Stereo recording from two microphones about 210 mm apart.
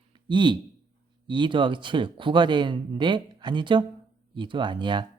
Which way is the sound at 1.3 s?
20° right (ahead or behind).